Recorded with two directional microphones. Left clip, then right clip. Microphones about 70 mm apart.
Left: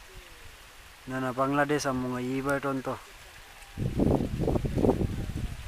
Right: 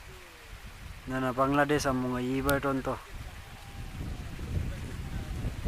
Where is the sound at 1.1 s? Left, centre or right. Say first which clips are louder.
Even; left.